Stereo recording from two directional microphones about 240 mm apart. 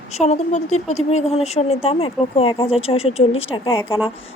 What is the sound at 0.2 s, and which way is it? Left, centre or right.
Speech, left.